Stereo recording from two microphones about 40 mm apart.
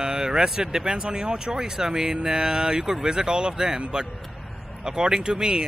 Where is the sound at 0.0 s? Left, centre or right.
Centre.